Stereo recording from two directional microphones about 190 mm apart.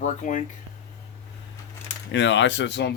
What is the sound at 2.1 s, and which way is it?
Speech, 70° left (ahead or behind).